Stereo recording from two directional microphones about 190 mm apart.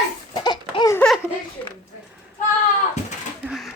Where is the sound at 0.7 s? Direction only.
25° left (ahead or behind).